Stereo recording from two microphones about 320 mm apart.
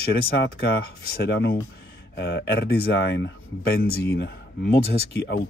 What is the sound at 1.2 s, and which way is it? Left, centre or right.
Speech, left.